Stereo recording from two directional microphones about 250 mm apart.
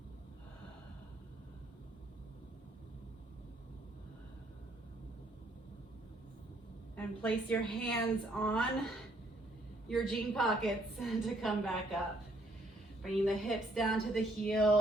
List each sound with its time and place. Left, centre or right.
6.9 s a woman's voice: centre
9.9 s a woman's voice: centre
13.0 s a woman's voice: centre